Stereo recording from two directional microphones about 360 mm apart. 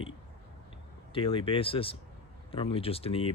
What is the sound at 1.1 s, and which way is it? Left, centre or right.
Speech, centre.